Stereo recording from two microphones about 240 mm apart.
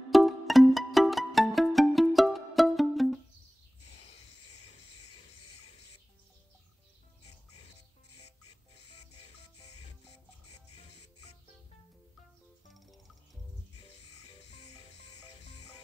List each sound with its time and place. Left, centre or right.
0.1 s music: centre
8.2 s music: left
12.6 s music: centre
14.1 s music: left